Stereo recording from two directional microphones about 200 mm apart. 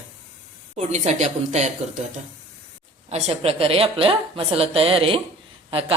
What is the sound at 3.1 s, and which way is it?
Speech, 30° right (ahead or behind).